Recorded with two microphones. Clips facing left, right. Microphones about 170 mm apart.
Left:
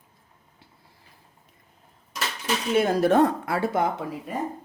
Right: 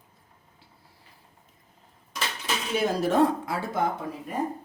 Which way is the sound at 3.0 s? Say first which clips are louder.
Left 3 dB; 60° left (ahead or behind).